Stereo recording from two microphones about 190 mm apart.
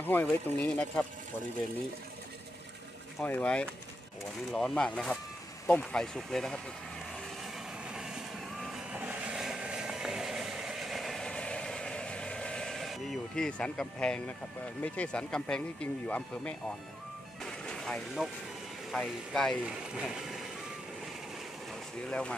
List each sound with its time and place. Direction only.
0.0 s speech: 10° left (ahead or behind)
3.2 s speech: 10° left (ahead or behind)
7.9 s vehicle: 5° right (ahead or behind)
14.8 s speech: 5° left (ahead or behind)
17.4 s music: centre (ahead or behind)
18.9 s speech: centre (ahead or behind)